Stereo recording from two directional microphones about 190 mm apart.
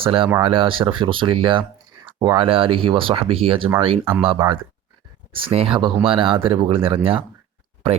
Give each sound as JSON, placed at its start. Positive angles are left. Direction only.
{"t": 0.0, "sound": "speech", "side_deg": -25}